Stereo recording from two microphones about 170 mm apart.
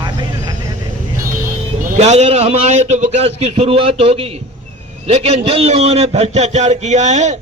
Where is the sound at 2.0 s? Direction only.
40° right (ahead or behind).